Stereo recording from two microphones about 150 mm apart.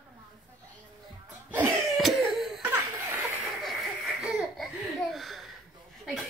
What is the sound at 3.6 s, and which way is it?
Baby laughter, centre (ahead or behind).